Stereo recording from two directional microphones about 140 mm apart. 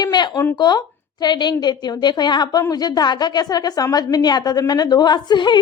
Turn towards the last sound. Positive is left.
turn(degrees=35)  # may be behind; listen again after turning